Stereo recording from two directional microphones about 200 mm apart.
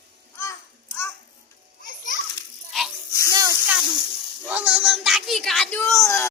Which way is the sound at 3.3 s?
15° right (ahead or behind).